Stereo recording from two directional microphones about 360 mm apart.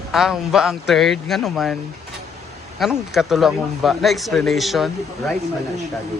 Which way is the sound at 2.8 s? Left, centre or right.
Centre.